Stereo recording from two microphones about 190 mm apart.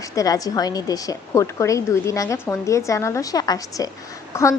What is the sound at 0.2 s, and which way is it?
A woman's voice, 20° left (ahead or behind).